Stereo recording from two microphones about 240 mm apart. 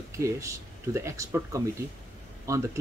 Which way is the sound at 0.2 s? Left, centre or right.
Centre.